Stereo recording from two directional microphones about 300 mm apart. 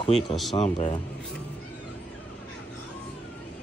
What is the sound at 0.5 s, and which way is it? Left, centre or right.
Speech, centre.